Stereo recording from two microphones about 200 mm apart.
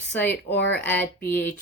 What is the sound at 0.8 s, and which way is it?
Speech, 10° left (ahead or behind).